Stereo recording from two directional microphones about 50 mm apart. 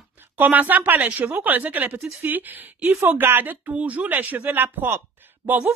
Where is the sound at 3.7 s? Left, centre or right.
Right.